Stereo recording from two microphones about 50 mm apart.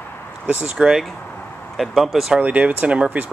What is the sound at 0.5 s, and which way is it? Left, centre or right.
Speech, right.